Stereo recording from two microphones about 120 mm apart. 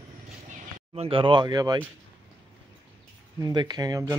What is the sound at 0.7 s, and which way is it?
Speech, 55° right (ahead or behind).